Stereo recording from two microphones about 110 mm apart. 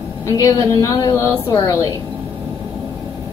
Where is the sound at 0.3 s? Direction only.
30° left (ahead or behind).